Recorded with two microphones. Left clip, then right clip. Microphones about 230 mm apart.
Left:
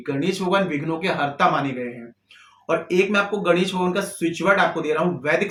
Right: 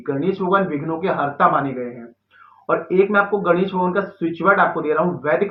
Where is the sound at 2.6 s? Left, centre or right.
Left.